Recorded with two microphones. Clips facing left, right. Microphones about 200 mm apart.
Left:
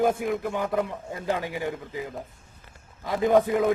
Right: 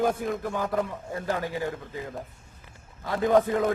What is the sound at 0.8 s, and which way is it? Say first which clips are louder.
A man's voice: left 1 dB; 20° left (ahead or behind).